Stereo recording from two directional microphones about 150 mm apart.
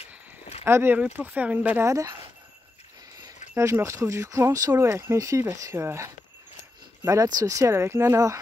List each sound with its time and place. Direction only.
0.7 s speech: 15° right (ahead or behind)
3.5 s speech: 20° right (ahead or behind)